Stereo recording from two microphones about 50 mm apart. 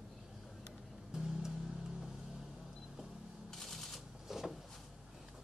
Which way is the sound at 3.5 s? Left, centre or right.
Centre.